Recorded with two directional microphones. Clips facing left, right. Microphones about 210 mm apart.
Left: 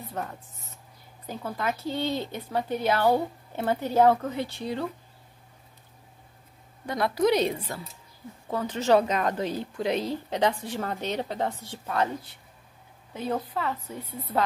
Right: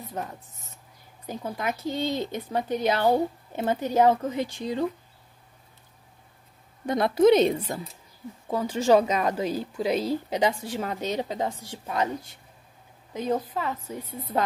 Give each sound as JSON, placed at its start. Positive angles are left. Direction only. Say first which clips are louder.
{"t": 0.1, "sound": "a woman's voice", "louder": "even", "side_deg": -15}
{"t": 6.9, "sound": "a woman's voice", "louder": "right 5 dB", "side_deg": -25}
{"t": 13.1, "sound": "a woman's voice", "louder": "right 3 dB", "side_deg": -15}